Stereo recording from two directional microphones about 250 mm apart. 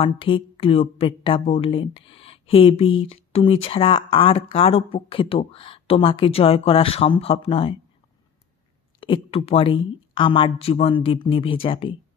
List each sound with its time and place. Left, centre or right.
0.0 s speech: left
9.0 s speech: left